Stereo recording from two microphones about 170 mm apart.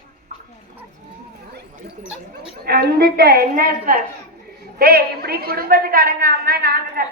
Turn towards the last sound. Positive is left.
turn(degrees=-65)  # may be behind; listen again after turning